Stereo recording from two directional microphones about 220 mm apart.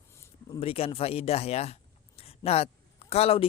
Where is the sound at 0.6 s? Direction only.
25° left (ahead or behind).